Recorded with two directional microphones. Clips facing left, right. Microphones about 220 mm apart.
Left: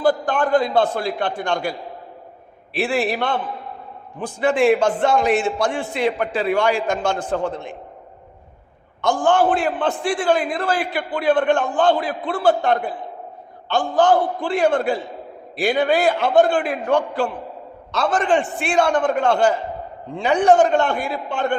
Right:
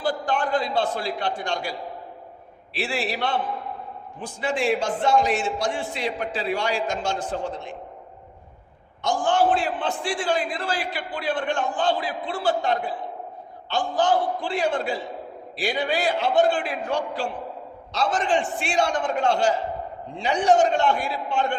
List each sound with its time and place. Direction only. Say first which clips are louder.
0.0 s a man's voice: left 6 dB; 50° left (ahead or behind)
2.7 s a man's voice: left 7 dB; 55° left (ahead or behind)
9.0 s a man's voice: left 4 dB; 55° left (ahead or behind)